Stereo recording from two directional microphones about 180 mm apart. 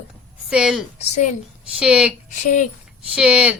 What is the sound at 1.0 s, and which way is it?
Speech, 40° left (ahead or behind).